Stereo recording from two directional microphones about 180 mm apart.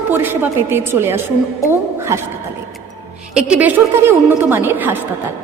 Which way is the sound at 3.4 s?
5° right (ahead or behind).